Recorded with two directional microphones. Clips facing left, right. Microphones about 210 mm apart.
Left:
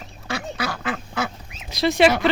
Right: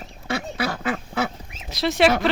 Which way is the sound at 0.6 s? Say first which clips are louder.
Right 2 dB; 25° right (ahead or behind).